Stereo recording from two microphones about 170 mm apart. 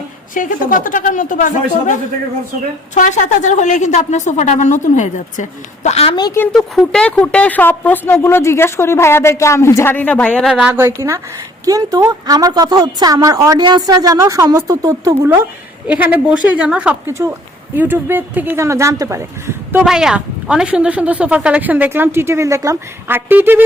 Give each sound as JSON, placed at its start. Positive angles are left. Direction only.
{"t": 0.3, "sound": "a woman's voice", "side_deg": 55}
{"t": 2.9, "sound": "a woman's voice", "side_deg": 45}
{"t": 6.1, "sound": "speech", "side_deg": 25}
{"t": 6.7, "sound": "a woman's voice", "side_deg": 5}
{"t": 10.7, "sound": "a woman's voice", "side_deg": -15}
{"t": 19.8, "sound": "speech", "side_deg": -5}